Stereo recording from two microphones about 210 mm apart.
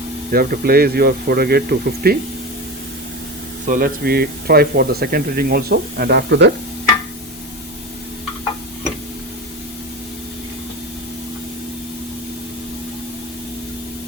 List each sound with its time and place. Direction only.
0.3 s speech: 45° right (ahead or behind)
3.7 s speech: 45° right (ahead or behind)